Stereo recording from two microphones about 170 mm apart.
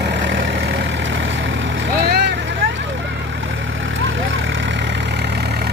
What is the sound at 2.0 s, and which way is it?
Vehicle, 75° right (ahead or behind).